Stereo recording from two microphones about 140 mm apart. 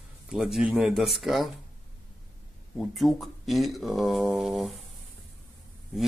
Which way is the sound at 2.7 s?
Centre (ahead or behind).